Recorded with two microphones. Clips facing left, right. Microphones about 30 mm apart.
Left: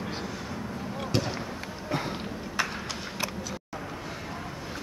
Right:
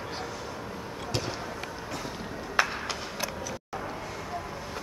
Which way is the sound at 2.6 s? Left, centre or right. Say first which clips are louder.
Right 4 dB; centre.